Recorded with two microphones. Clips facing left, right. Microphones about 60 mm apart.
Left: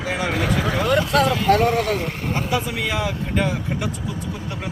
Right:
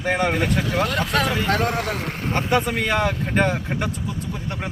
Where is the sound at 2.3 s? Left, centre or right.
Right.